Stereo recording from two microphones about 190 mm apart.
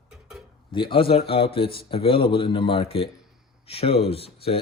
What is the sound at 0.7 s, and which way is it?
Speech, 25° left (ahead or behind).